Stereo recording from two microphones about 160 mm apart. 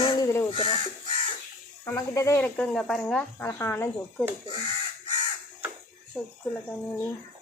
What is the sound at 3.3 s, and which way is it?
Speech, 15° left (ahead or behind).